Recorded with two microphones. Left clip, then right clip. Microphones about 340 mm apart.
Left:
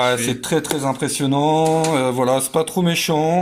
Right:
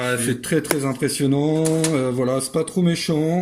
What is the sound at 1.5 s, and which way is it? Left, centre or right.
Mantra, left.